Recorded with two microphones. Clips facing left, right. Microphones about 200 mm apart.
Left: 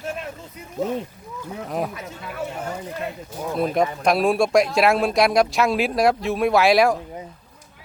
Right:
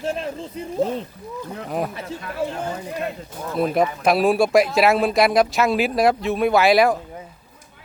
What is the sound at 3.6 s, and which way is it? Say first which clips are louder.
Speech: right 2 dB; centre (ahead or behind).